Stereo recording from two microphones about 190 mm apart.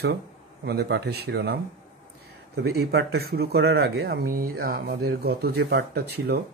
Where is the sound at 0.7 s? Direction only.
60° right (ahead or behind).